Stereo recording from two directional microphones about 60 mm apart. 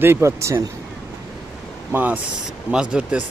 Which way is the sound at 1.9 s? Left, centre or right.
Right.